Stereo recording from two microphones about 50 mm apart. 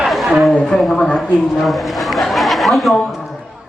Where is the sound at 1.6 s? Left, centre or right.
Centre.